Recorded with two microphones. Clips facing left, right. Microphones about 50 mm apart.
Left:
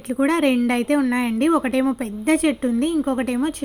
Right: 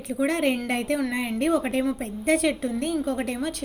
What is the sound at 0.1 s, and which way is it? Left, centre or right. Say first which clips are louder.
A woman's voice: left 6 dB; left.